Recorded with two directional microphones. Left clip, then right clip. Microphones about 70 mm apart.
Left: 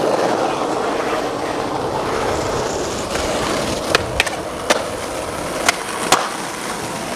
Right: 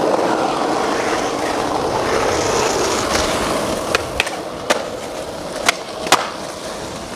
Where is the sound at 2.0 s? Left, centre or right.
Right.